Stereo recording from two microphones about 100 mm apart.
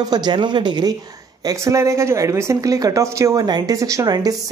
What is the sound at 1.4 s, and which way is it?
Speech, 30° right (ahead or behind).